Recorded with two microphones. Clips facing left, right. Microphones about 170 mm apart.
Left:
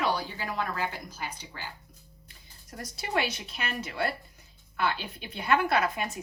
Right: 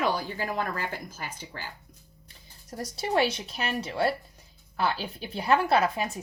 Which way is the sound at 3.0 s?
30° right (ahead or behind).